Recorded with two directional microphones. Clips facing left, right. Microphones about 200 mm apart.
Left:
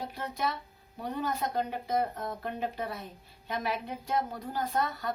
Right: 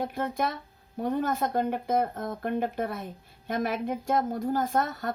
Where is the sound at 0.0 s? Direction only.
50° right (ahead or behind).